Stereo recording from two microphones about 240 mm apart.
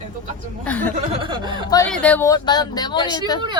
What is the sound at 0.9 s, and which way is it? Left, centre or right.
Chuckle, right.